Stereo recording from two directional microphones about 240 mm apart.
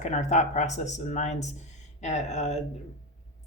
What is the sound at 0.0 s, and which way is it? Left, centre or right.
Speech, left.